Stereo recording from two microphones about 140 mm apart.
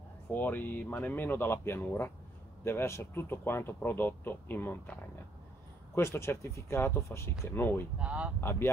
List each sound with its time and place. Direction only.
0.3 s speech: 15° left (ahead or behind)
5.9 s speech: 20° left (ahead or behind)
8.0 s speech: 10° right (ahead or behind)
8.4 s speech: 15° left (ahead or behind)